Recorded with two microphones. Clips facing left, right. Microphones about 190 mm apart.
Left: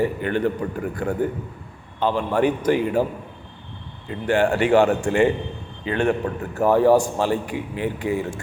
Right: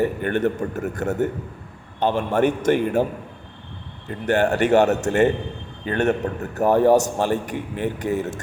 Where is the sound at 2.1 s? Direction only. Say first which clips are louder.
Even; 45° right (ahead or behind).